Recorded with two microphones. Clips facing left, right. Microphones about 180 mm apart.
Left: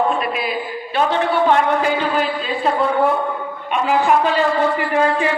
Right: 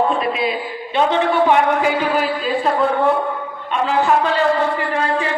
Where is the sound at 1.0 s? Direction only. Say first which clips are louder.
Right 1 dB; 15° right (ahead or behind).